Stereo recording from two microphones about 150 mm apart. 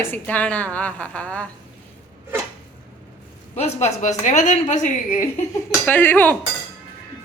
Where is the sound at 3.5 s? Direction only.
45° left (ahead or behind).